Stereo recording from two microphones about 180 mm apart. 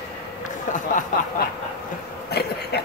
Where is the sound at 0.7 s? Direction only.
45° left (ahead or behind).